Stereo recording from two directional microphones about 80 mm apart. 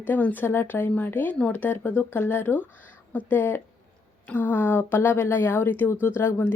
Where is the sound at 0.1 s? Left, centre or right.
Left.